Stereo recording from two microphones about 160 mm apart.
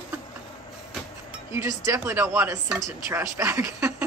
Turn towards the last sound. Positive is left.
turn(degrees=-15)  # may be behind; listen again after turning